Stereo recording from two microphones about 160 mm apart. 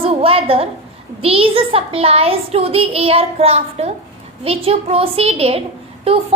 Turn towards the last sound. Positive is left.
turn(degrees=-35)  # may be behind; listen again after turning